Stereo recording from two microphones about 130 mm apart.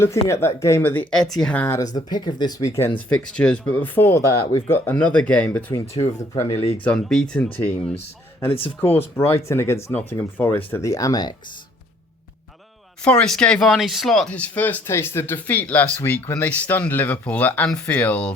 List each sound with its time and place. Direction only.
0.0 s speech: 20° left (ahead or behind)
2.0 s speech: 35° left (ahead or behind)
3.3 s speech: 10° left (ahead or behind)
5.8 s speech: 50° left (ahead or behind)
6.8 s speech: 5° left (ahead or behind)
8.4 s speech: 45° left (ahead or behind)
9.0 s speech: 20° left (ahead or behind)
13.1 s speech: 5° left (ahead or behind)